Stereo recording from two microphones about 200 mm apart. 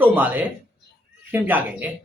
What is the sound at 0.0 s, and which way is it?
Speech, 10° right (ahead or behind).